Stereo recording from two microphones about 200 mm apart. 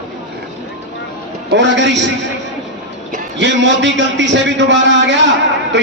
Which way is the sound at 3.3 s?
65° right (ahead or behind).